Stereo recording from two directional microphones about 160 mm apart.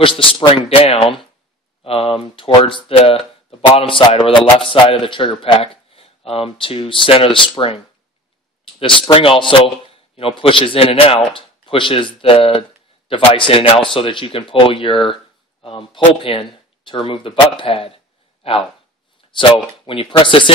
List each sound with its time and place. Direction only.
0.0 s a man's voice: 35° left (ahead or behind)
19.2 s a sound: 35° left (ahead or behind)
19.9 s a man's voice: 35° left (ahead or behind)